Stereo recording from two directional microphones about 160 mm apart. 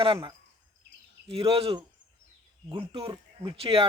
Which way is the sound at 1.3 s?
35° right (ahead or behind).